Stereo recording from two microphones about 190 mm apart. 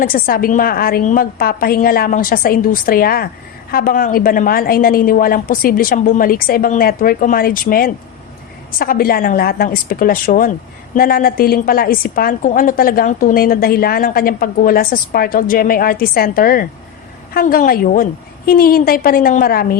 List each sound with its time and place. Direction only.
0.0 s a woman's voice: 50° left (ahead or behind)